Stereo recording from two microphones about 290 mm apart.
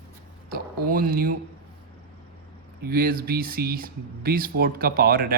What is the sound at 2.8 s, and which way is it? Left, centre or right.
Speech, right.